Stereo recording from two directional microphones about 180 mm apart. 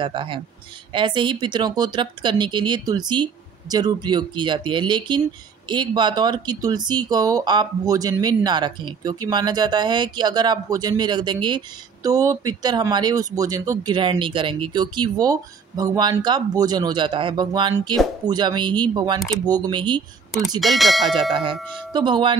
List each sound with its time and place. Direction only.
0.0 s speech: 25° right (ahead or behind)
20.6 s speech: centre (ahead or behind)
21.3 s speech: 30° right (ahead or behind)